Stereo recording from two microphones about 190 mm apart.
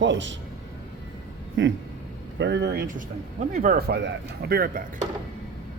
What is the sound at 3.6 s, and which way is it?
Speech, 50° right (ahead or behind).